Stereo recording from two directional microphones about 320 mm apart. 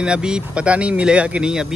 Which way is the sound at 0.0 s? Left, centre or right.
Centre.